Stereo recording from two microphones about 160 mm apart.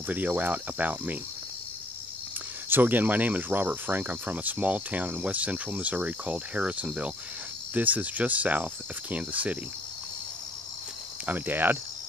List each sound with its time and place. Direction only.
0.1 s speech: 10° right (ahead or behind)
2.7 s speech: 10° right (ahead or behind)
11.2 s speech: 10° right (ahead or behind)